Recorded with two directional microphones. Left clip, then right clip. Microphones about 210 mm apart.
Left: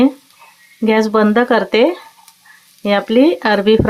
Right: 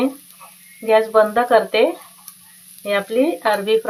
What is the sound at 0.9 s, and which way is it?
Speech, 45° left (ahead or behind).